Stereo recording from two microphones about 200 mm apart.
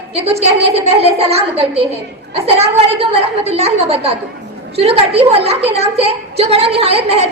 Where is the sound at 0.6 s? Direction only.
30° right (ahead or behind).